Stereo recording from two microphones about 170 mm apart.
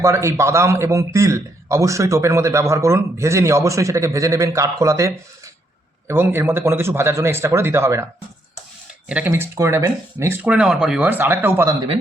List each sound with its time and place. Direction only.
0.0 s a man's voice: 15° right (ahead or behind)